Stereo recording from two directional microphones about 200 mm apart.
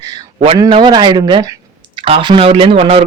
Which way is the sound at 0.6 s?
20° right (ahead or behind).